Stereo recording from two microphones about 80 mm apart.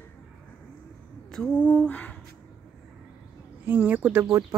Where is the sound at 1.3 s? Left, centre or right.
Centre.